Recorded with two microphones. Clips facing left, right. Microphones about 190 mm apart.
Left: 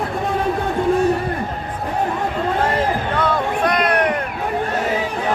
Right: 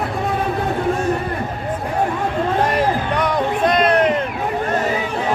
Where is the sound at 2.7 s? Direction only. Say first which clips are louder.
Right 1 dB; 15° right (ahead or behind).